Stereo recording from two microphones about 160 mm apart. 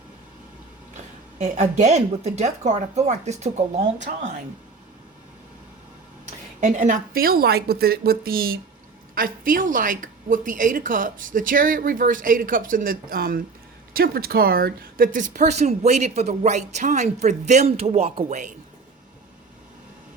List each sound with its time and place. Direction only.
1.4 s a woman's voice: 50° right (ahead or behind)
6.6 s a woman's voice: 55° right (ahead or behind)